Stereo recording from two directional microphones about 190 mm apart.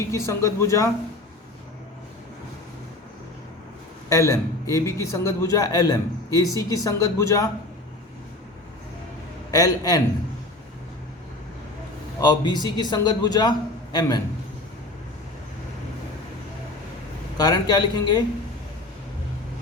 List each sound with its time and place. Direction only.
0.0 s a man's voice: 15° left (ahead or behind)
4.1 s a man's voice: 15° left (ahead or behind)
9.5 s a man's voice: 20° left (ahead or behind)
12.2 s a man's voice: 20° left (ahead or behind)
17.3 s a man's voice: 20° left (ahead or behind)